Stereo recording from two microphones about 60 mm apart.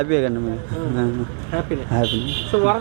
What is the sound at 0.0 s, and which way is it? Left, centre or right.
Speech, right.